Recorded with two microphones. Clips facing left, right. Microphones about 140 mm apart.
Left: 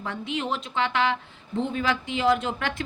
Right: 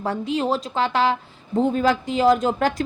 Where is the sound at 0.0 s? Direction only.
35° right (ahead or behind).